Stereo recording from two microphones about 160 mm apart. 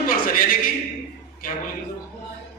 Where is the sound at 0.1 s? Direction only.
60° left (ahead or behind).